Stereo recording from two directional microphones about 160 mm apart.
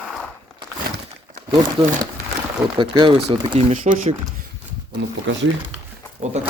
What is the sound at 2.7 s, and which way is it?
Speech, 30° right (ahead or behind).